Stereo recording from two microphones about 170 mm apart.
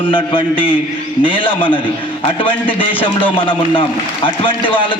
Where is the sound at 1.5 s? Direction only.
10° left (ahead or behind).